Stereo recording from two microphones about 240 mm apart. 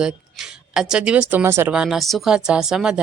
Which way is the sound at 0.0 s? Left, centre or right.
Centre.